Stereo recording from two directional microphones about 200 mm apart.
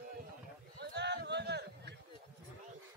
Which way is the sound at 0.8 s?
60° right (ahead or behind).